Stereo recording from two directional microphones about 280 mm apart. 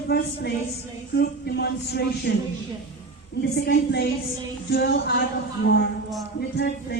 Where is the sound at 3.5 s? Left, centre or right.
Left.